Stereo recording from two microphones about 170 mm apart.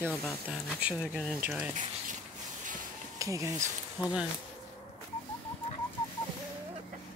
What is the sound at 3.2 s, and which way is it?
Speech, 20° right (ahead or behind).